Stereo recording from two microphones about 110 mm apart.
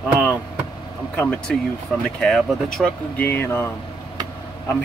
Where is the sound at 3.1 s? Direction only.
15° left (ahead or behind).